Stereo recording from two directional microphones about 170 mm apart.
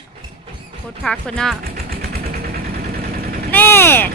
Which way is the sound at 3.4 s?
10° left (ahead or behind).